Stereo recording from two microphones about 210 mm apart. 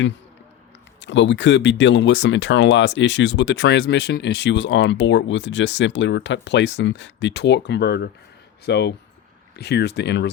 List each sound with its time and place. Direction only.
0.9 s speech: 60° left (ahead or behind)